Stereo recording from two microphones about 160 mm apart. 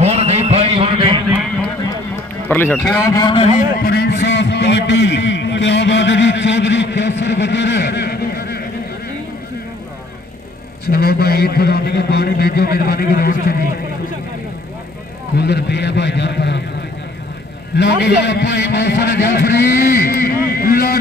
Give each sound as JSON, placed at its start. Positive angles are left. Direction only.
{"t": 0.0, "sound": "a sound", "side_deg": -40}
{"t": 2.4, "sound": "a man's voice", "side_deg": 10}
{"t": 3.0, "sound": "a man's voice", "side_deg": 20}
{"t": 3.5, "sound": "a sound", "side_deg": 75}
{"t": 10.9, "sound": "a man's voice", "side_deg": 75}
{"t": 15.3, "sound": "a man's voice", "side_deg": 90}
{"t": 17.7, "sound": "a man's voice", "side_deg": 90}